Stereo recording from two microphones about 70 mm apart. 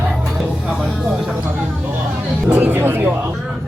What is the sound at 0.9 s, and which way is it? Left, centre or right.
Speech, centre.